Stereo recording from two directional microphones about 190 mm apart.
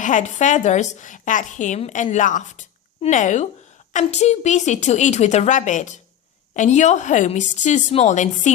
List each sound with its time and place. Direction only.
0.0 s a woman's voice: 40° left (ahead or behind)